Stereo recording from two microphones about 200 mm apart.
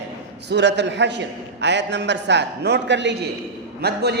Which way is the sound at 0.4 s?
60° right (ahead or behind).